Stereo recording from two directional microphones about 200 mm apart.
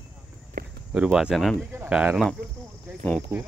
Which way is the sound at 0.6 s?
50° right (ahead or behind).